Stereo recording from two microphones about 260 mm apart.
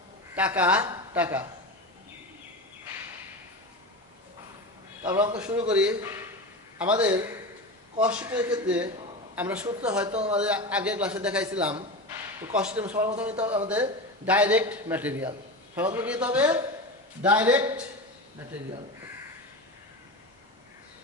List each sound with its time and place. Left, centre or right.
0.3 s a woman's voice: centre
5.0 s a woman's voice: centre
7.1 s a woman's voice: centre
8.0 s a man's voice: centre